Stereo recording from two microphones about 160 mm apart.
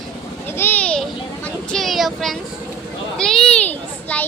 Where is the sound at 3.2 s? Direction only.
5° left (ahead or behind).